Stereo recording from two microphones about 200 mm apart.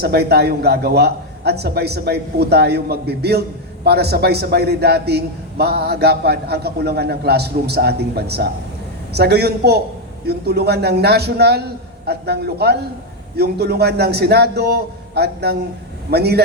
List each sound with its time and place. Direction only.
0.0 s a man's voice: 50° right (ahead or behind)